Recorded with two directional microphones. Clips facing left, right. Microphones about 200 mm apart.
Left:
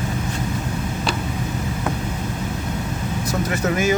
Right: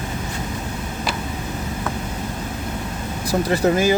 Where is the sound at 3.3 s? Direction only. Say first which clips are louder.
Right 5 dB; 30° right (ahead or behind).